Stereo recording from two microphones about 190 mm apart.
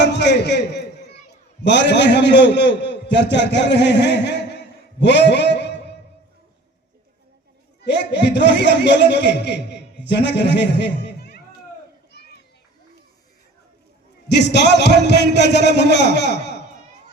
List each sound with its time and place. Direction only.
0.0 s a sound: 65° left (ahead or behind)
1.6 s a man's voice: 65° left (ahead or behind)
7.9 s a man's voice: 65° left (ahead or behind)
12.1 s children playing: 60° left (ahead or behind)
14.3 s a man's voice: 65° left (ahead or behind)